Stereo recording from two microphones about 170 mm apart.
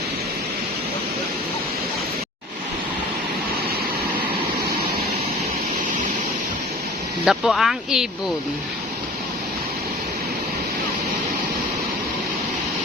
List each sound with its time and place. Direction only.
7.3 s speech: centre (ahead or behind)